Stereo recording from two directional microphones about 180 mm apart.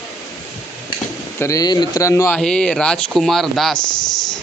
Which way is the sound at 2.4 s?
5° left (ahead or behind).